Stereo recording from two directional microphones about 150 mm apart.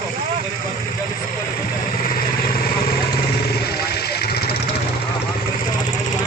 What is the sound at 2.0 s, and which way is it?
Vehicle, 75° left (ahead or behind).